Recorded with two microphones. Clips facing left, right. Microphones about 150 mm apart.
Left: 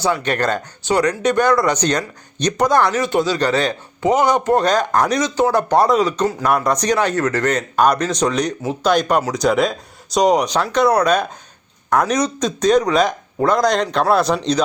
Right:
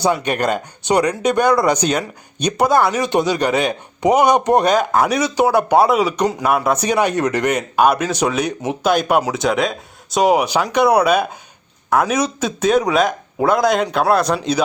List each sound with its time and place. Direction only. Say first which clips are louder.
0.0 s speech: right 1 dB; 15° right (ahead or behind)